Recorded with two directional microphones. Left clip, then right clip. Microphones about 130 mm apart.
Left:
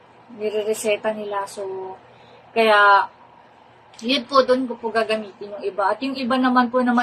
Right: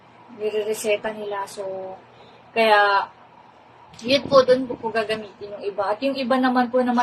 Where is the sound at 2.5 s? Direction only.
20° left (ahead or behind).